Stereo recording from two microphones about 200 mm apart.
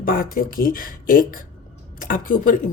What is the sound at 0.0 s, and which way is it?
Speech, 45° left (ahead or behind).